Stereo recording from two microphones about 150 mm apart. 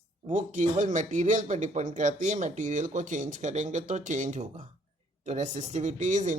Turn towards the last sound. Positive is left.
turn(degrees=-55)  # may be behind; listen again after turning